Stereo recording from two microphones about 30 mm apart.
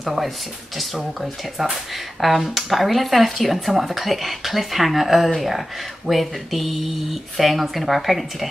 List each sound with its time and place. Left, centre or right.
0.0 s speech: centre